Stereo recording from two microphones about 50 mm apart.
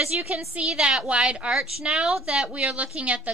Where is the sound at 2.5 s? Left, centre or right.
Right.